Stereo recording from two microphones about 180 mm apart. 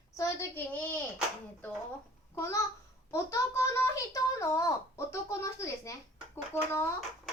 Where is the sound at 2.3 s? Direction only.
15° left (ahead or behind).